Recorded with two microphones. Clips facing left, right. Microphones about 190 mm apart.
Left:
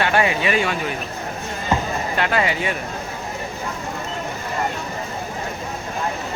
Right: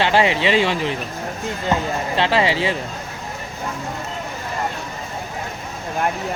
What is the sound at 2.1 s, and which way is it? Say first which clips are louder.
Speech: right 3 dB; 25° right (ahead or behind).